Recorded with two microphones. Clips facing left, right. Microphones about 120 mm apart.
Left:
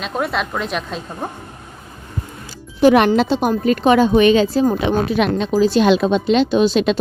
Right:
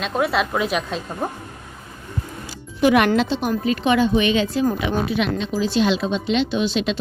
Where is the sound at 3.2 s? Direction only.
45° left (ahead or behind).